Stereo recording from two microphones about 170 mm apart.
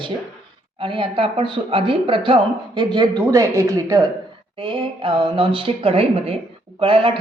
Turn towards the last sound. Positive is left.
turn(degrees=-30)  # may be behind; listen again after turning